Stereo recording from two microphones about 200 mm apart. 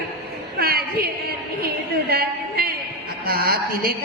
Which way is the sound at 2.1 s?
50° right (ahead or behind).